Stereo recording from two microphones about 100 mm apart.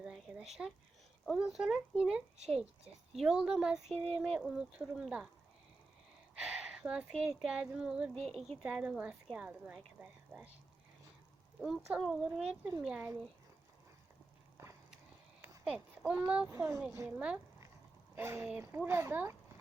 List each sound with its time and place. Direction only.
0.6 s a woman's voice: 15° right (ahead or behind)
1.2 s speech: centre (ahead or behind)
3.8 s speech: 80° right
4.3 s speech: 5° right (ahead or behind)
6.4 s a sound: 10° right (ahead or behind)
7.4 s a woman's voice: 5° right (ahead or behind)
11.6 s a woman's voice: centre (ahead or behind)
14.6 s a sound: 30° right (ahead or behind)
15.6 s a woman's voice: 5° right (ahead or behind)
16.5 s speech: 30° right (ahead or behind)
17.1 s a woman's voice: 10° right (ahead or behind)
18.1 s speech: 25° right (ahead or behind)